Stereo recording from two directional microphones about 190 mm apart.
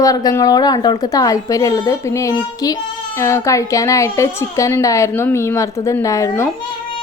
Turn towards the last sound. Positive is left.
turn(degrees=15)  # may be behind; listen again after turning